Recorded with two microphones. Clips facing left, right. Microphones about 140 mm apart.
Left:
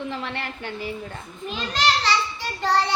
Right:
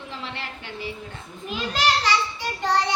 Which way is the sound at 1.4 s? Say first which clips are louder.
Even; 10° right (ahead or behind).